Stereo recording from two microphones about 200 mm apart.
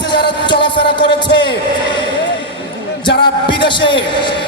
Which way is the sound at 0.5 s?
25° left (ahead or behind).